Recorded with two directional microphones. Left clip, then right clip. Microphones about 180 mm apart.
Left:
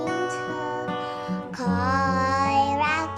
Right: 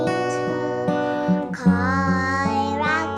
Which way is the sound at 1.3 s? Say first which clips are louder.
Right 5 dB; 10° left (ahead or behind).